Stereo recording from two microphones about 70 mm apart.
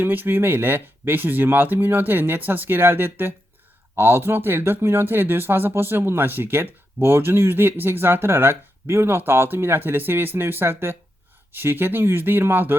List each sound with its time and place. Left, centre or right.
0.0 s speech: right